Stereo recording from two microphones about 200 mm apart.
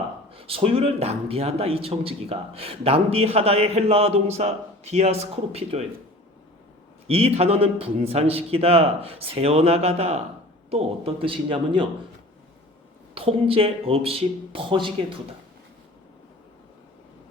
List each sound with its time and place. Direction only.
0.3 s speech: 30° right (ahead or behind)
7.1 s a man's voice: 30° right (ahead or behind)
13.1 s a man's voice: 25° right (ahead or behind)